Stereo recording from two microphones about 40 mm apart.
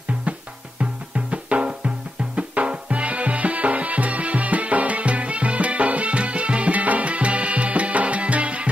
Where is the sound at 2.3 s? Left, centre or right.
Right.